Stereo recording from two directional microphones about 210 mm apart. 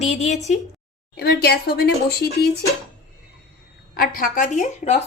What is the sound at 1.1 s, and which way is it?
Speech, 50° left (ahead or behind).